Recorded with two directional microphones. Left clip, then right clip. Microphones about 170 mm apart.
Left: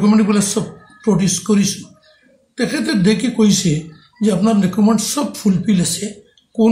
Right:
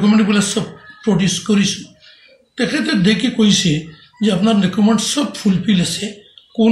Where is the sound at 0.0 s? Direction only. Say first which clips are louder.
Even; 15° left (ahead or behind).